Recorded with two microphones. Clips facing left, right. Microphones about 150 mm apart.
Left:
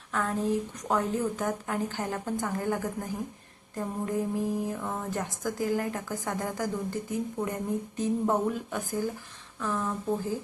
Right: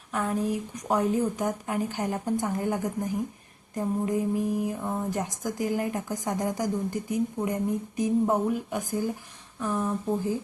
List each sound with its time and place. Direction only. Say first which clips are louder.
0.1 s a woman's voice: right 1 dB; 15° right (ahead or behind)